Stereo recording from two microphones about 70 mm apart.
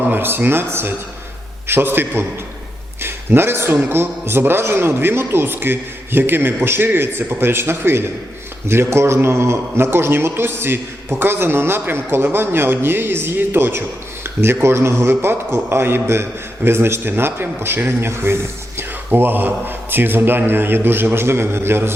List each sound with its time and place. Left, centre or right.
0.1 s a man's voice: right